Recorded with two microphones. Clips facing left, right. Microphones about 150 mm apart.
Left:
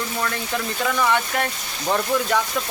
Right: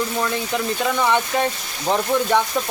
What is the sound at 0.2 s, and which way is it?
Speech, 15° right (ahead or behind).